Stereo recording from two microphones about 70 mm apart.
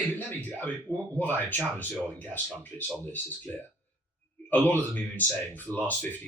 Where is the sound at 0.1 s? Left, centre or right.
Left.